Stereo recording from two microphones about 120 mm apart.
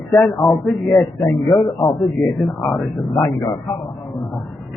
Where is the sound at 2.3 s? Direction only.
10° left (ahead or behind).